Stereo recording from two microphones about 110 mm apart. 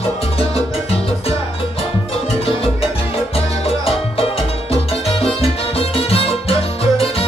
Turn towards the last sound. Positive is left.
turn(degrees=60)  # may be behind; listen again after turning